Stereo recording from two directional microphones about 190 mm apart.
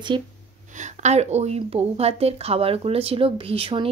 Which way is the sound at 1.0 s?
35° right (ahead or behind).